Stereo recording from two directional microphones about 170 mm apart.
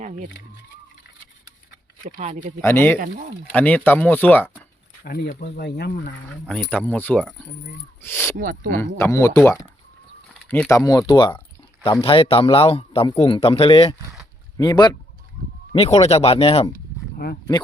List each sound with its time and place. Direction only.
0.0 s speech: 45° right (ahead or behind)
2.0 s speech: 50° right (ahead or behind)
2.6 s speech: 10° left (ahead or behind)
5.0 s speech: 65° left (ahead or behind)
6.5 s speech: 5° left (ahead or behind)
8.4 s speech: 55° right (ahead or behind)
8.7 s speech: 15° left (ahead or behind)
10.8 s speech: 20° left (ahead or behind)
15.7 s speech: 35° left (ahead or behind)